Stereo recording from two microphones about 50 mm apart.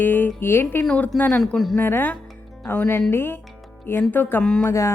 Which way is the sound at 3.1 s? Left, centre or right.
Left.